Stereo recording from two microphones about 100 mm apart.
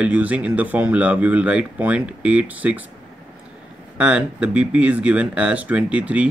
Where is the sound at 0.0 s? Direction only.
15° right (ahead or behind).